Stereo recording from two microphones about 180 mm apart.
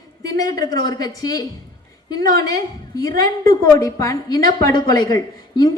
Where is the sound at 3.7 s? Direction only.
20° left (ahead or behind).